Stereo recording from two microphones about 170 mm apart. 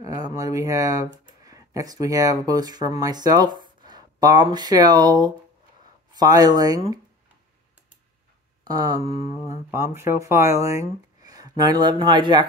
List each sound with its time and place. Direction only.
0.0 s speech: 20° right (ahead or behind)
8.6 s a sound: 20° right (ahead or behind)
9.2 s speech: 20° right (ahead or behind)